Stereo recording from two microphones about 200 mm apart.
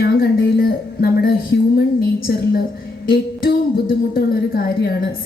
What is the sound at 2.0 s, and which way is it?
A woman's voice, 50° left (ahead or behind).